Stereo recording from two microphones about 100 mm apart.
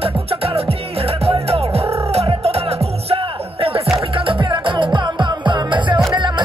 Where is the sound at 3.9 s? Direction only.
60° right (ahead or behind).